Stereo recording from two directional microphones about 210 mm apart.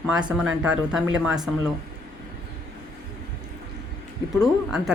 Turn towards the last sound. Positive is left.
turn(degrees=0)  # may be behind; listen again after turning